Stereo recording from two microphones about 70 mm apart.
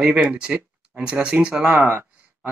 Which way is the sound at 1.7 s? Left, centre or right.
Right.